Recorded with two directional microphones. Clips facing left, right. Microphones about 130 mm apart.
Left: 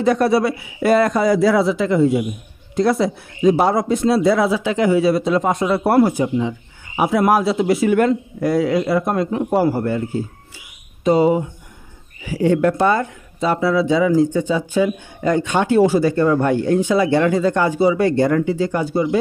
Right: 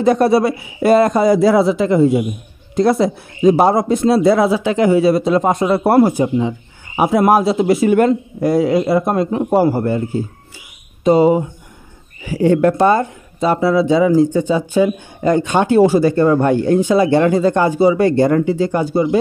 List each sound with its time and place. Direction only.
0.0 s speech: 40° right (ahead or behind)
11.1 s speech: 30° right (ahead or behind)
12.3 s speech: 45° right (ahead or behind)